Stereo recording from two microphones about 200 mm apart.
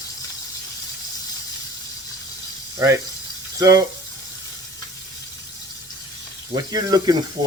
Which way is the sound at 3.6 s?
15° right (ahead or behind).